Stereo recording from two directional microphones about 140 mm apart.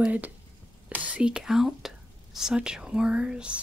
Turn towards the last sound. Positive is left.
turn(degrees=-5)  # may be behind; listen again after turning